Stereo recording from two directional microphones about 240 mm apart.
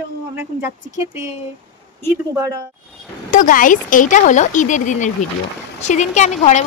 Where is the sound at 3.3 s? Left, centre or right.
Left.